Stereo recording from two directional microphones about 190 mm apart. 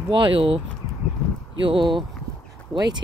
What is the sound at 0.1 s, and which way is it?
Speech, 25° right (ahead or behind).